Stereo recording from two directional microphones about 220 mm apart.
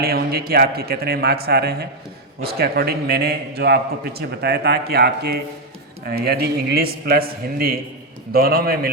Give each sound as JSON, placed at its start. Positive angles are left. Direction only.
{"t": 0.0, "sound": "a man's voice", "side_deg": -45}